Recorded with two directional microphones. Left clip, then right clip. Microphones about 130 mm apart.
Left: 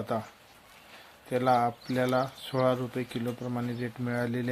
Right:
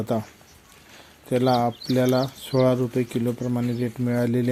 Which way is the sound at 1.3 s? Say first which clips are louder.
Right 4 dB; 25° right (ahead or behind).